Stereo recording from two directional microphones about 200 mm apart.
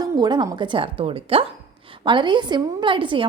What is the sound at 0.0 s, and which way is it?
A woman's voice, 20° right (ahead or behind).